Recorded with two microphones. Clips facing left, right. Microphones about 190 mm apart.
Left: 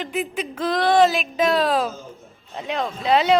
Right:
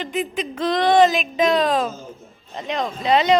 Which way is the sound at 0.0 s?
5° left (ahead or behind).